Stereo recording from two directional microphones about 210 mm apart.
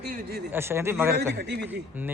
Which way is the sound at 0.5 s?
10° right (ahead or behind).